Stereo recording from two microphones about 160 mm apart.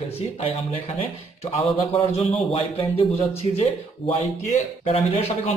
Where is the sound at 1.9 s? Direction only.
40° left (ahead or behind).